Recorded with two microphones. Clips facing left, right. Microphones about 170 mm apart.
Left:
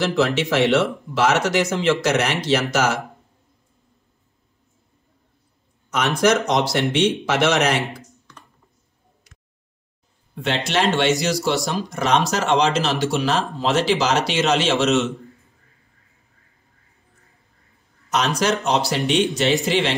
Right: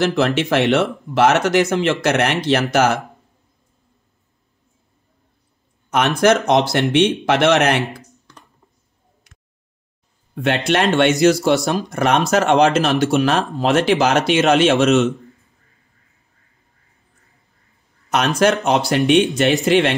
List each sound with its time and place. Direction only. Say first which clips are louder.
0.1 s speech: right 2 dB; 60° right (ahead or behind)
6.2 s speech: right 3 dB; 60° right (ahead or behind)
10.3 s speech: right 4 dB; 55° right (ahead or behind)
18.1 s speech: right 4 dB; 55° right (ahead or behind)